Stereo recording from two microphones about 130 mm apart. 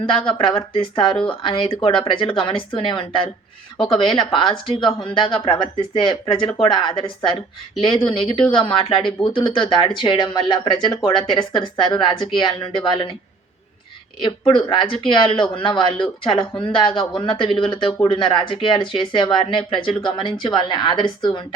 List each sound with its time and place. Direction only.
0.0 s speech: 40° left (ahead or behind)
14.2 s speech: 40° left (ahead or behind)